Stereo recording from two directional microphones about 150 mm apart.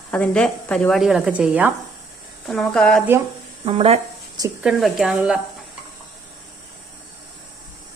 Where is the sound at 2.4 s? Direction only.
5° left (ahead or behind).